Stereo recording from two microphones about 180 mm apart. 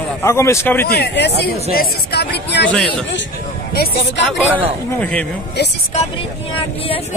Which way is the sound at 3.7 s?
60° left (ahead or behind).